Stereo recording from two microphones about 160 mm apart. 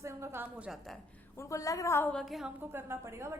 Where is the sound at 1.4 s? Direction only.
20° left (ahead or behind); by 2.5 s centre (ahead or behind).